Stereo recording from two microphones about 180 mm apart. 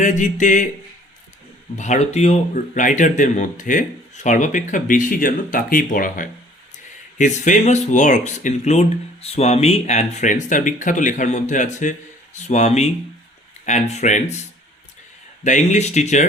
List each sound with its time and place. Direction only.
0.0 s speech: 45° left (ahead or behind)
1.7 s speech: 40° left (ahead or behind)
15.4 s speech: 40° left (ahead or behind)